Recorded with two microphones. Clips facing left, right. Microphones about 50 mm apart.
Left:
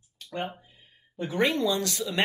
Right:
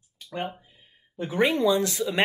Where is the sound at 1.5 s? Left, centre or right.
Right.